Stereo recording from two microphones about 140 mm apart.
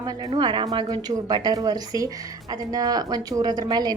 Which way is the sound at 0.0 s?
30° right (ahead or behind).